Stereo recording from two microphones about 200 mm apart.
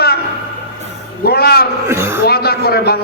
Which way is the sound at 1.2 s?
50° left (ahead or behind).